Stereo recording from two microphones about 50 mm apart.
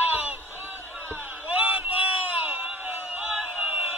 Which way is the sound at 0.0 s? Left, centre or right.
Right.